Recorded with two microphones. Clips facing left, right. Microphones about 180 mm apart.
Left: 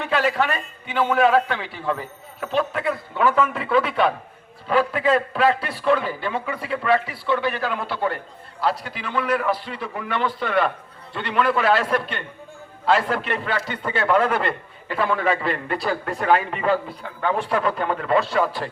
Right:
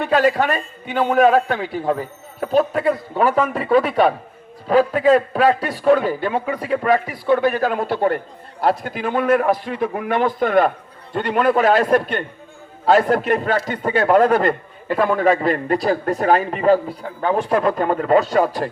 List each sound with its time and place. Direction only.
0.0 s a man's voice: 40° right (ahead or behind)